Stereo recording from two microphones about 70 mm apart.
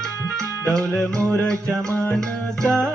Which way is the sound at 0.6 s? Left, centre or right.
Centre.